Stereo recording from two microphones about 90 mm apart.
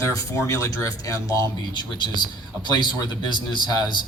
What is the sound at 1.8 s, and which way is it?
A man's voice, 55° left (ahead or behind).